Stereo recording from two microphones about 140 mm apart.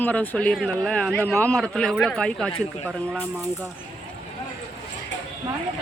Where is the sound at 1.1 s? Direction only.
15° left (ahead or behind).